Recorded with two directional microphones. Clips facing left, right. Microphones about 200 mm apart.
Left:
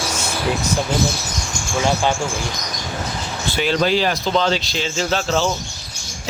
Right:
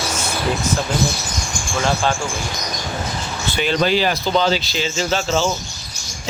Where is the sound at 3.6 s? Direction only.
Centre (ahead or behind).